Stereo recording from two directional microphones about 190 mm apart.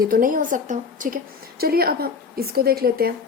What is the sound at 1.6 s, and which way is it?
A woman's voice, 55° right (ahead or behind).